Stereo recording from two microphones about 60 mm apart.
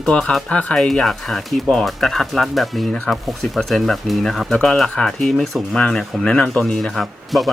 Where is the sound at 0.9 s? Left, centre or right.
Centre.